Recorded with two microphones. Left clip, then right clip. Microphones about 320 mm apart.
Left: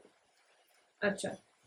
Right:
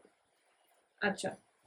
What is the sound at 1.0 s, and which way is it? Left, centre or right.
Speech, centre.